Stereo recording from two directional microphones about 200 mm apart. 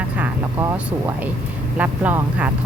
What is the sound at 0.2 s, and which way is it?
Speech, 10° right (ahead or behind).